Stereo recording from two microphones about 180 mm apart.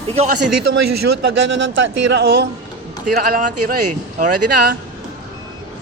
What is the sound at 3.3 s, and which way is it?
Speech, 50° right (ahead or behind).